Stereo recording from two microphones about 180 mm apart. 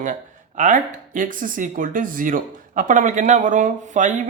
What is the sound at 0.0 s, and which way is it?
Speech, 45° right (ahead or behind).